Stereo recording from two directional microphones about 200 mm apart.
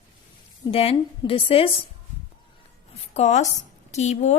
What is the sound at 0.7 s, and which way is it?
A woman's voice, 30° left (ahead or behind).